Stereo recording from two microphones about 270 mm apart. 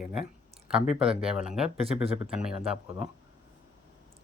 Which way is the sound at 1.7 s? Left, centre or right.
Right.